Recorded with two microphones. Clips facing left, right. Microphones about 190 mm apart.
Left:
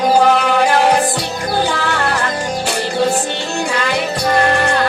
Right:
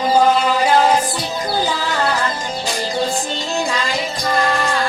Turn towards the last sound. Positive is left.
turn(degrees=65)  # may be behind; listen again after turning